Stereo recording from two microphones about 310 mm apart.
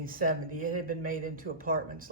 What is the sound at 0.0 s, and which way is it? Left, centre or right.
Speech, right.